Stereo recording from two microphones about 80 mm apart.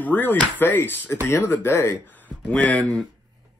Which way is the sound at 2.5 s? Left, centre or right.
Centre.